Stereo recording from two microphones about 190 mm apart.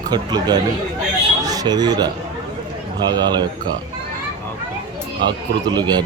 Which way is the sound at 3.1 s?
20° right (ahead or behind).